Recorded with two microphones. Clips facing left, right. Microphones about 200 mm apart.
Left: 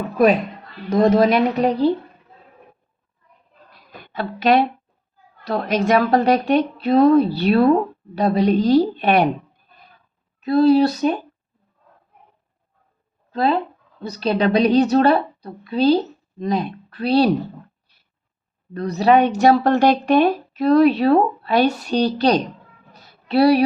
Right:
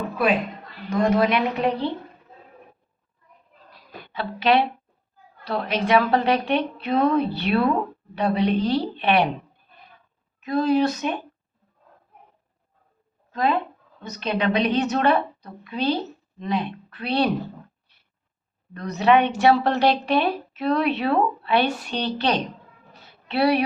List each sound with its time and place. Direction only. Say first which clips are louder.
0.9 s a woman's voice: left 5 dB; 35° left (ahead or behind)
3.7 s a sound: right 1 dB; 50° left (ahead or behind)
5.5 s a woman's voice: left 3 dB; 45° left (ahead or behind)
10.4 s a woman's voice: left 6 dB; 35° left (ahead or behind)
13.3 s a woman's voice: left 4 dB; 35° left (ahead or behind)
18.7 s a woman's voice: left 3 dB; 35° left (ahead or behind)
22.9 s a sound: left 9 dB; 40° left (ahead or behind)